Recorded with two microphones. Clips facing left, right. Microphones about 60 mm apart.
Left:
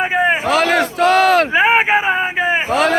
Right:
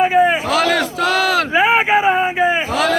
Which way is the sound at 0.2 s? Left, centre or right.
Left.